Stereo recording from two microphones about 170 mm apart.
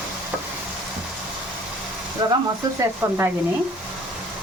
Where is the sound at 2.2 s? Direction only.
25° right (ahead or behind).